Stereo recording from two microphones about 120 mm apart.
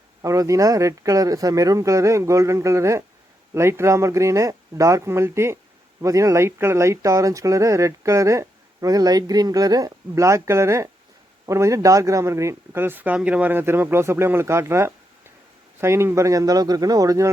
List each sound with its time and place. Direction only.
0.2 s speech: 25° right (ahead or behind)